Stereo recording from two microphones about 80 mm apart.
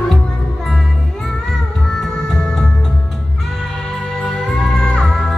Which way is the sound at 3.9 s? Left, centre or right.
Centre.